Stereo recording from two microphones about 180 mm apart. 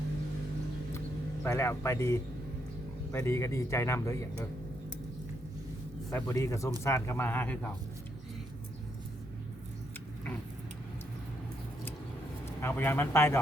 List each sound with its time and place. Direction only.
1.5 s speech: 15° left (ahead or behind)
6.1 s speech: 20° left (ahead or behind)
12.5 s speech: 10° left (ahead or behind)